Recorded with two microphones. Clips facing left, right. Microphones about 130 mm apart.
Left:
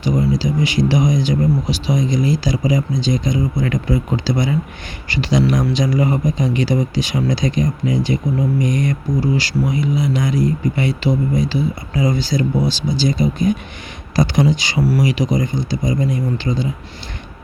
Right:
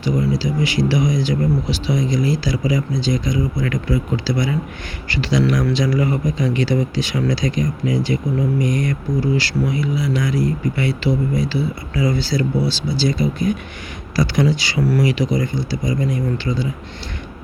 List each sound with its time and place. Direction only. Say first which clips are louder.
0.0 s speech: left 2 dB; 20° left (ahead or behind)